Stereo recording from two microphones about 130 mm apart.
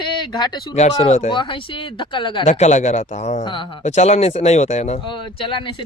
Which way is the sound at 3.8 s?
60° left (ahead or behind).